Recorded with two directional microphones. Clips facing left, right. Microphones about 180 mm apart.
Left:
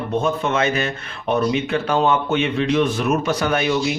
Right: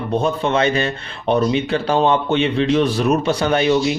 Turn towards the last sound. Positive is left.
turn(degrees=-30)  # may be behind; listen again after turning